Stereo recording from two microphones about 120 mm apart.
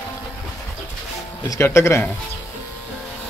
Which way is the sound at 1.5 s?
20° left (ahead or behind).